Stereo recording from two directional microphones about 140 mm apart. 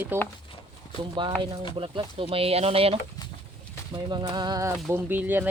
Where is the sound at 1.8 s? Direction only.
40° right (ahead or behind).